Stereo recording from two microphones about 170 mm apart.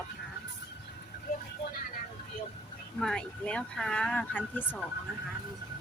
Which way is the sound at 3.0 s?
5° left (ahead or behind).